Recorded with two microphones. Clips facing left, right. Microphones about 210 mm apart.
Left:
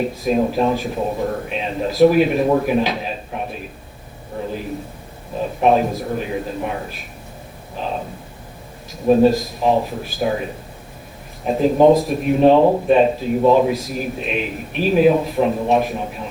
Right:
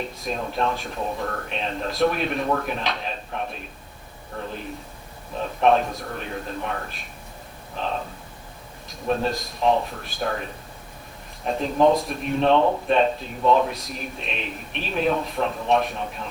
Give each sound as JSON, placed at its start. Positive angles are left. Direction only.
{"t": 0.0, "sound": "a man's voice", "side_deg": 5}
{"t": 5.4, "sound": "a man's voice", "side_deg": 5}